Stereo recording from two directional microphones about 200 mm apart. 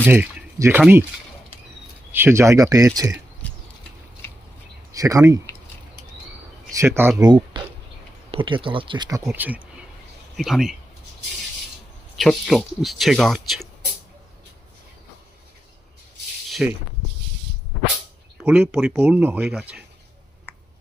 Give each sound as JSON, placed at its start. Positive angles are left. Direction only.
{"t": 0.0, "sound": "speech", "side_deg": -10}
{"t": 2.1, "sound": "speech", "side_deg": -10}
{"t": 3.4, "sound": "a sound", "side_deg": 5}
{"t": 4.9, "sound": "speech", "side_deg": -15}
{"t": 6.7, "sound": "speech", "side_deg": -10}
{"t": 12.1, "sound": "speech", "side_deg": 0}
{"t": 16.5, "sound": "a sound", "side_deg": 0}
{"t": 18.4, "sound": "speech", "side_deg": -5}